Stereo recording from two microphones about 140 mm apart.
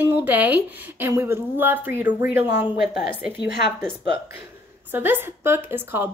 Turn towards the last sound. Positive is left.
turn(degrees=-15)  # may be behind; listen again after turning